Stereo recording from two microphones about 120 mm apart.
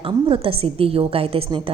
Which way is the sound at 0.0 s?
50° right (ahead or behind).